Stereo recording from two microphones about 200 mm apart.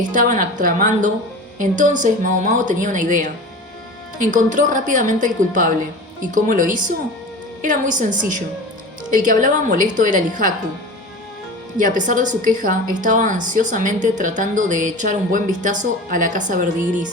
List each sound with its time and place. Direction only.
0.1 s speech: 40° right (ahead or behind)
4.3 s speech: 40° right (ahead or behind)
11.8 s speech: 40° right (ahead or behind)